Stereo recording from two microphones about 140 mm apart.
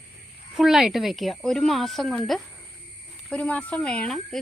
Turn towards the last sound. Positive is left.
turn(degrees=5)  # may be behind; listen again after turning